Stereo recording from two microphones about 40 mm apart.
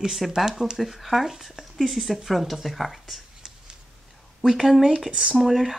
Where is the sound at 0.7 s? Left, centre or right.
Centre.